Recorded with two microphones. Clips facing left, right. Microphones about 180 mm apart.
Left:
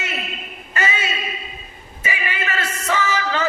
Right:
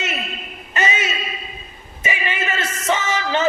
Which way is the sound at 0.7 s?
20° right (ahead or behind).